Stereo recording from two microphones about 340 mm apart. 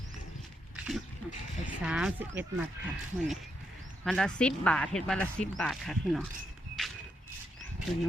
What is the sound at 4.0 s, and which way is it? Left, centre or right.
Speech, centre.